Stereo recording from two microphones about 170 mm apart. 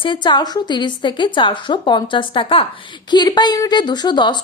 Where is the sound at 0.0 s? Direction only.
30° left (ahead or behind).